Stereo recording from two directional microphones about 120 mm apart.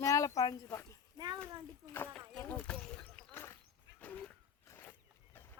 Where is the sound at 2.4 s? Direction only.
15° left (ahead or behind).